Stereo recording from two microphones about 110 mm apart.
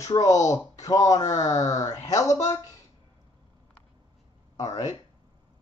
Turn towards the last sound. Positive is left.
turn(degrees=35)  # may be behind; listen again after turning